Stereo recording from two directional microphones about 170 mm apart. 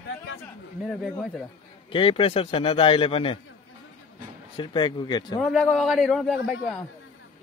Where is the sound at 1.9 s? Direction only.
30° left (ahead or behind).